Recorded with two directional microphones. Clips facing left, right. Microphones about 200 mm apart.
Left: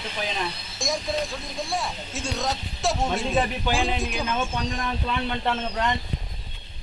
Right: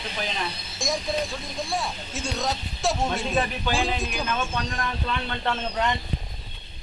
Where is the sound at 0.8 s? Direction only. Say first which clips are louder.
Even; centre (ahead or behind).